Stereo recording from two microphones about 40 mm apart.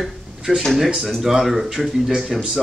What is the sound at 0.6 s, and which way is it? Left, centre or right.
Speech, centre.